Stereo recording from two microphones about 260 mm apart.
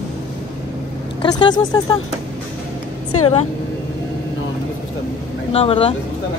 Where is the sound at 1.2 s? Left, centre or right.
Centre.